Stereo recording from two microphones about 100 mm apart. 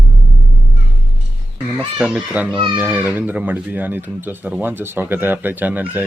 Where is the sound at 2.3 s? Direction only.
15° right (ahead or behind).